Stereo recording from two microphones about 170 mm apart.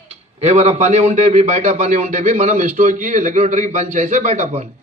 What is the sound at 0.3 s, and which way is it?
A man's voice, 40° right (ahead or behind).